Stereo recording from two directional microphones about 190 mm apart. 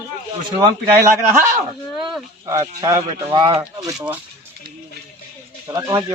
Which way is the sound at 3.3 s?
25° right (ahead or behind).